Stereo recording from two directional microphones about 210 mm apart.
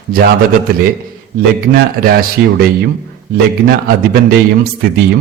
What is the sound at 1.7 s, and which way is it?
Speech, 45° right (ahead or behind).